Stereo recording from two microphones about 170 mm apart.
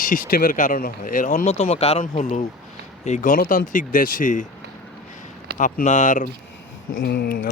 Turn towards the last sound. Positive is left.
turn(degrees=60)  # may be behind; listen again after turning